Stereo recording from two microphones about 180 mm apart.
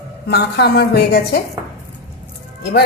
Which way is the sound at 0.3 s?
65° left (ahead or behind).